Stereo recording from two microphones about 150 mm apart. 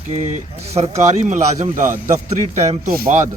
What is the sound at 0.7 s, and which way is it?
A man's voice, 45° right (ahead or behind).